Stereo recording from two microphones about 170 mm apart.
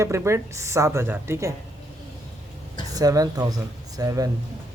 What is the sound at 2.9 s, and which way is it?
Speech, 20° right (ahead or behind).